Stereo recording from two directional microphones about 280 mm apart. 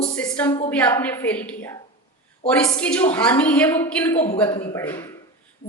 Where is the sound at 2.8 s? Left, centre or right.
Centre.